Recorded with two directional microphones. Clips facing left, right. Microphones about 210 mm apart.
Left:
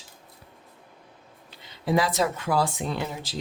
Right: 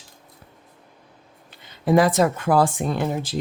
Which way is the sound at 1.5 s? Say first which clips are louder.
Right 6 dB; 50° right (ahead or behind).